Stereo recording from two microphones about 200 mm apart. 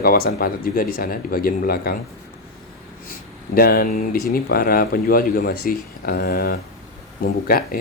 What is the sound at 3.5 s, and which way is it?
Speech, 45° left (ahead or behind).